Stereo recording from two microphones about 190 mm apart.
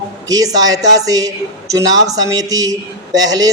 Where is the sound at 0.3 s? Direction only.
20° right (ahead or behind).